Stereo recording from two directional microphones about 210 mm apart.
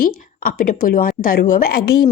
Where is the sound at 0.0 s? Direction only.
40° left (ahead or behind).